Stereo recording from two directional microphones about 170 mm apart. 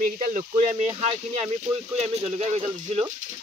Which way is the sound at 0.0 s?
50° right (ahead or behind).